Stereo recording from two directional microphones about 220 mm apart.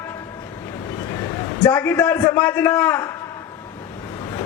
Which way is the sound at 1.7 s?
5° left (ahead or behind).